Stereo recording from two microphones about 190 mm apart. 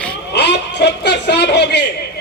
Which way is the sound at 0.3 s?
65° left (ahead or behind).